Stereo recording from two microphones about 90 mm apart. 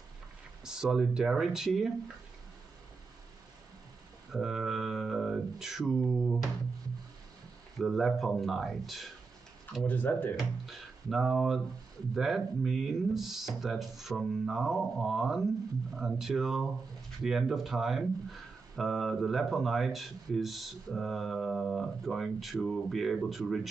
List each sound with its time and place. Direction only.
0.7 s speech: 5° right (ahead or behind)
4.3 s a sound: 5° right (ahead or behind)
7.8 s speech: centre (ahead or behind)
9.8 s speech: 20° left (ahead or behind)
10.3 s speech: centre (ahead or behind)